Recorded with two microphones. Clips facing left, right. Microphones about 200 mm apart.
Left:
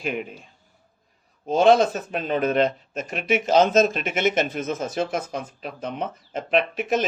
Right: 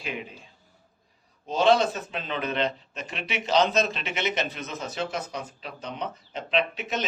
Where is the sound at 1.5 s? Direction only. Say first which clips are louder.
Left 5 dB; 45° left (ahead or behind).